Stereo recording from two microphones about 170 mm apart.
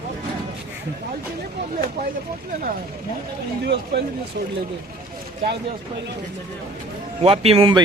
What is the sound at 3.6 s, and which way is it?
Speech, 75° right (ahead or behind).